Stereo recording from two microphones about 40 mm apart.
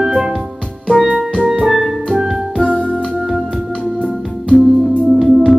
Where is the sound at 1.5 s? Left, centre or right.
Centre.